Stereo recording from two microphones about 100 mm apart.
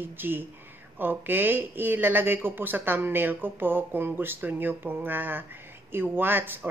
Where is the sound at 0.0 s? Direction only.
20° right (ahead or behind).